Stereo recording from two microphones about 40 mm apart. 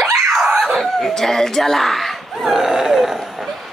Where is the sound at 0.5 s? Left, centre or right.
Right.